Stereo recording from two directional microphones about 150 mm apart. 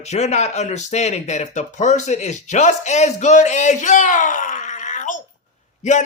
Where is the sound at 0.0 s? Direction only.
50° left (ahead or behind).